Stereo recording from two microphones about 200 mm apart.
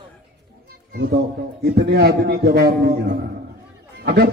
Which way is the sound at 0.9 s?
50° right (ahead or behind).